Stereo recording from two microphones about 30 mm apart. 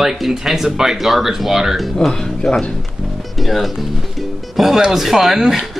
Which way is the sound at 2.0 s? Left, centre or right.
Left.